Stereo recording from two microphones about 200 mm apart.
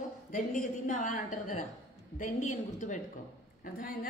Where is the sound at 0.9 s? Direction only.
40° left (ahead or behind).